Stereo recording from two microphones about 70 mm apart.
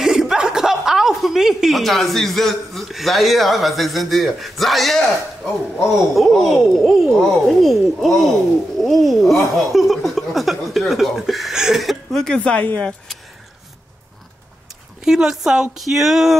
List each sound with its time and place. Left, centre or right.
0.0 s speech: centre
12.4 s speech: centre
15.0 s speech: centre